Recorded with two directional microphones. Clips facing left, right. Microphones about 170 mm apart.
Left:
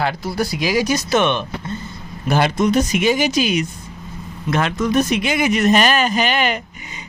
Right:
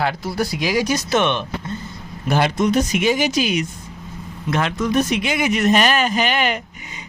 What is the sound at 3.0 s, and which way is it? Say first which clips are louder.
Speech: left 1 dB; 45° left (ahead or behind).